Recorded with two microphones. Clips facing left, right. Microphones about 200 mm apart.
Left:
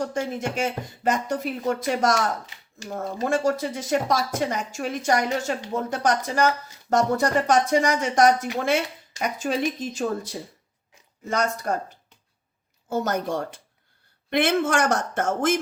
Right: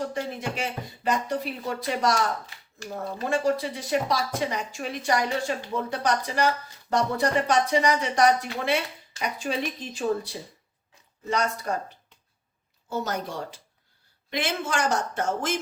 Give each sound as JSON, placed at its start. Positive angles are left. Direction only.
{"t": 0.0, "sound": "a woman's voice", "side_deg": 45}
{"t": 12.9, "sound": "a woman's voice", "side_deg": 50}